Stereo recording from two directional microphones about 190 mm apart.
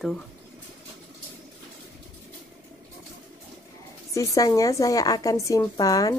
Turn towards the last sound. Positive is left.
turn(degrees=20)  # may be behind; listen again after turning